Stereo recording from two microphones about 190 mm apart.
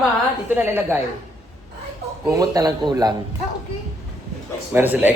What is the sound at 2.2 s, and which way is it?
Speech, 20° right (ahead or behind).